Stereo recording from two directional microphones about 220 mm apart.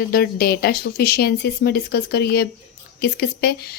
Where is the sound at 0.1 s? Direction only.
45° left (ahead or behind).